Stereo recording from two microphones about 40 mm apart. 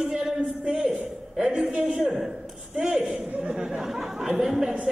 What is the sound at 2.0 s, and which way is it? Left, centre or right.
A man's voice, centre.